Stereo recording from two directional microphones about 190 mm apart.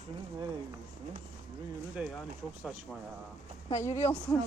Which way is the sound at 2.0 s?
5° right (ahead or behind).